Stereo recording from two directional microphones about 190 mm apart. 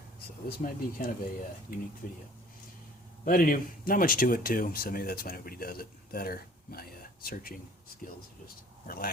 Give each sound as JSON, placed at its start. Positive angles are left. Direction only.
{"t": 0.4, "sound": "speech", "side_deg": 50}
{"t": 3.2, "sound": "speech", "side_deg": 50}